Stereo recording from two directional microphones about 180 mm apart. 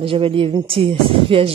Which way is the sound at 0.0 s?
30° right (ahead or behind).